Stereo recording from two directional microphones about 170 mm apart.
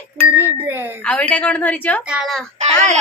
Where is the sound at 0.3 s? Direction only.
10° right (ahead or behind).